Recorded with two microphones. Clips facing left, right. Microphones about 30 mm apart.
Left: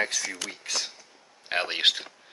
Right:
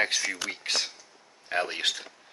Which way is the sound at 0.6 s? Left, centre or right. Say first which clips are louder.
Right 2 dB; right.